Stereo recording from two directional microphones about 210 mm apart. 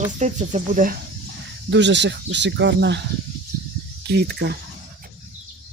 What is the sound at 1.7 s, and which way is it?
Speech, 60° right (ahead or behind).